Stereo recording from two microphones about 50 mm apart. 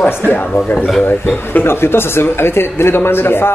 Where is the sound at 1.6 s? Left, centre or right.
Left.